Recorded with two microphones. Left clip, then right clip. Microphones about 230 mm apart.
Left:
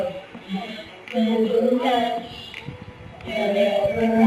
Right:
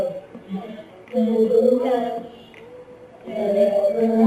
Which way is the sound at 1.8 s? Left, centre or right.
Centre.